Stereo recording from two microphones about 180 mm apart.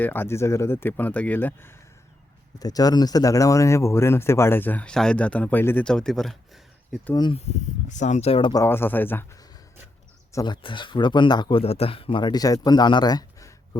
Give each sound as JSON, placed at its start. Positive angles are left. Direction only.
{"t": 0.0, "sound": "speech", "side_deg": 10}
{"t": 2.6, "sound": "speech", "side_deg": 20}
{"t": 7.1, "sound": "speech", "side_deg": 25}
{"t": 7.3, "sound": "speech", "side_deg": 40}
{"t": 8.6, "sound": "speech", "side_deg": 10}
{"t": 10.3, "sound": "speech", "side_deg": 25}